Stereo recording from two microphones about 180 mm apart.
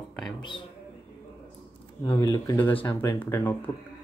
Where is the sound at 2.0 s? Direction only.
15° left (ahead or behind).